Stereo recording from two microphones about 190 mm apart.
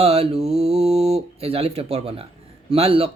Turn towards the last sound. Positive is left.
turn(degrees=-30)  # may be behind; listen again after turning